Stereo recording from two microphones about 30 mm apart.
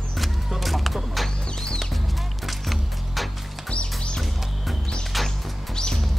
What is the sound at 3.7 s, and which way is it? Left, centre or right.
Music, left.